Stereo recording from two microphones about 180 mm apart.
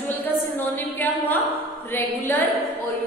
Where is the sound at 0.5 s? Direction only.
10° left (ahead or behind).